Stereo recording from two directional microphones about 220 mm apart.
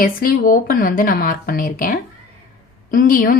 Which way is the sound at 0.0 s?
40° left (ahead or behind).